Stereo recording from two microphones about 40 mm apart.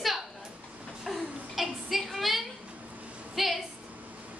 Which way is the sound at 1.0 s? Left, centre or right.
Centre.